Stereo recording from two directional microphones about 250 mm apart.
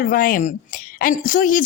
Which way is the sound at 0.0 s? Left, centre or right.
Left.